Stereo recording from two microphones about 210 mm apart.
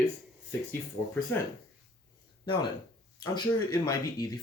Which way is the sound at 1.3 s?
10° left (ahead or behind).